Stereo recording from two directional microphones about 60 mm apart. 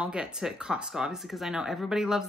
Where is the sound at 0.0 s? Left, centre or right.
Centre.